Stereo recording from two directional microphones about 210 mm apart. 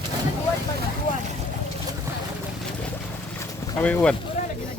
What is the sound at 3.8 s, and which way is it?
Speech, 5° left (ahead or behind).